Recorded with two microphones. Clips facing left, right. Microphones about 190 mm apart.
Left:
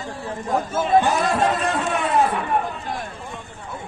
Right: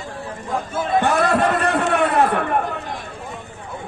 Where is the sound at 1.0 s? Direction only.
60° right (ahead or behind).